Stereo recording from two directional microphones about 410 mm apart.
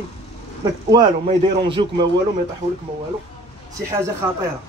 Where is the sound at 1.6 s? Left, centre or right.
Centre.